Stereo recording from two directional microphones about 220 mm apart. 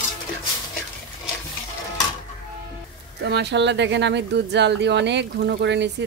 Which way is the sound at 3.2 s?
50° right (ahead or behind).